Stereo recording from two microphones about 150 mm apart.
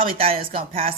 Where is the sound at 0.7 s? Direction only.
70° right (ahead or behind).